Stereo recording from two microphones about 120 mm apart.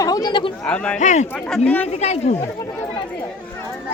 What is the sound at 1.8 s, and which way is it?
Speech, 65° left (ahead or behind).